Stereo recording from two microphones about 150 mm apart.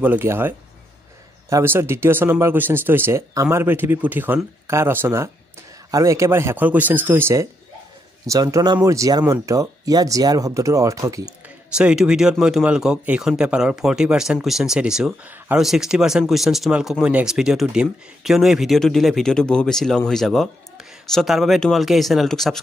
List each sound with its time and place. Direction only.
0.0 s speech: 15° right (ahead or behind)
11.2 s speech: 5° right (ahead or behind)